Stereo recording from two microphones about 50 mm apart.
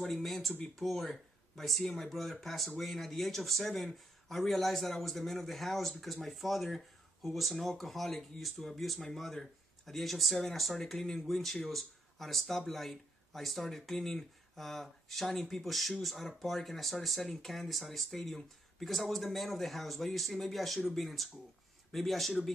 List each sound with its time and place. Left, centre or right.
0.0 s speech: centre